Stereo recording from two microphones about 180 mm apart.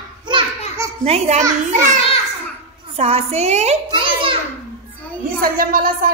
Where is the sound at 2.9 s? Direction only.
35° right (ahead or behind).